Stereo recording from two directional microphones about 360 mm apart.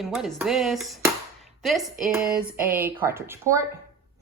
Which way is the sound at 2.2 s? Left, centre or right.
Right.